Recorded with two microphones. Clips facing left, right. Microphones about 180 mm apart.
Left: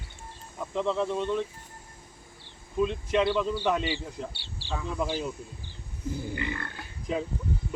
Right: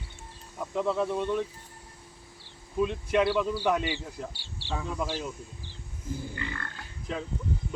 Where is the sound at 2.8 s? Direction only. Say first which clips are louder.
Even; 10° right (ahead or behind).